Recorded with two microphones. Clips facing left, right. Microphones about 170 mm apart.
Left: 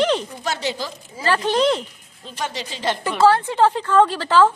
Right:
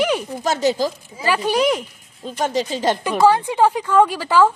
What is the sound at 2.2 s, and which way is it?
Speech, 45° right (ahead or behind).